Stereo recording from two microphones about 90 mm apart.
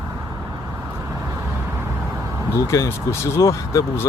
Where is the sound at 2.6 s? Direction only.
30° left (ahead or behind).